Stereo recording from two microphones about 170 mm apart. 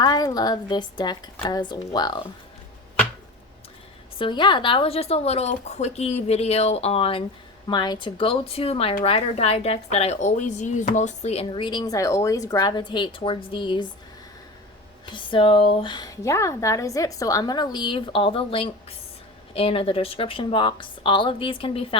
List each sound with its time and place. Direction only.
0.0 s speech: 20° left (ahead or behind)
4.2 s speech: 25° left (ahead or behind)
15.0 s speech: 30° left (ahead or behind)